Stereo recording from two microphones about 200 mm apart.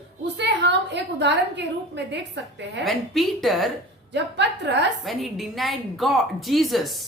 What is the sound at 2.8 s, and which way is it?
Speech, centre (ahead or behind).